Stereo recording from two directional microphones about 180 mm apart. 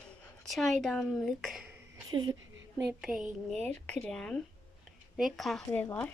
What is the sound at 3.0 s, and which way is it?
A woman's voice, 5° right (ahead or behind).